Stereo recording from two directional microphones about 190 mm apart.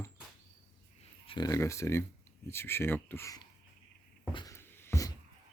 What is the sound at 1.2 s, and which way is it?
Speech, 20° left (ahead or behind).